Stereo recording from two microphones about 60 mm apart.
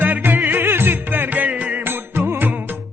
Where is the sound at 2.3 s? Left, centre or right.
Right.